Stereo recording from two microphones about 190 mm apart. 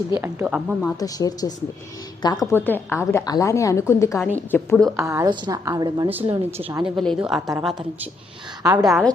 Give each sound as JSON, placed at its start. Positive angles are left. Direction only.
{"t": 0.2, "sound": "speech", "side_deg": -10}
{"t": 0.8, "sound": "a woman's voice", "side_deg": 15}
{"t": 4.9, "sound": "a woman's voice", "side_deg": -15}
{"t": 6.1, "sound": "speech", "side_deg": -10}
{"t": 6.9, "sound": "a woman's voice", "side_deg": 0}
{"t": 8.6, "sound": "a woman's voice", "side_deg": -20}
{"t": 8.9, "sound": "a woman's voice", "side_deg": 0}